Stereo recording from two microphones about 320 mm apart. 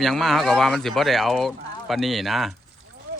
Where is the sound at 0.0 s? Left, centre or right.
Centre.